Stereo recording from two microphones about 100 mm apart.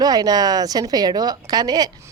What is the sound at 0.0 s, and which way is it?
A woman's voice, 40° right (ahead or behind).